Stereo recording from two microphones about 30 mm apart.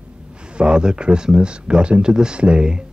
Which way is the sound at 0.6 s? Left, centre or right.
Right.